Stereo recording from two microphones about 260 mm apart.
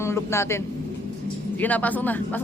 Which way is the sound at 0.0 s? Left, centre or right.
Centre.